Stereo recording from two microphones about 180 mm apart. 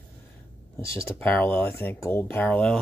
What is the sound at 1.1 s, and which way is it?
Speech, 10° left (ahead or behind).